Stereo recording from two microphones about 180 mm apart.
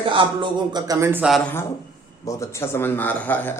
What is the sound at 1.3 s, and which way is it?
A man's voice, 10° left (ahead or behind).